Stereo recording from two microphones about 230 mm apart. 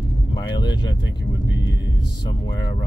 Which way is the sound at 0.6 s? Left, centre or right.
Centre.